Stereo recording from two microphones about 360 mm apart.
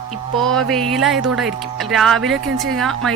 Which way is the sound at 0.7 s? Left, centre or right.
Centre.